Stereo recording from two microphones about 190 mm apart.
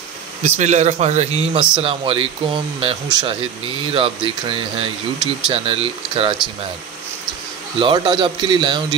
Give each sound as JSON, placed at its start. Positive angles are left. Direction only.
{"t": 0.4, "sound": "speech", "side_deg": -40}
{"t": 7.8, "sound": "speech", "side_deg": -25}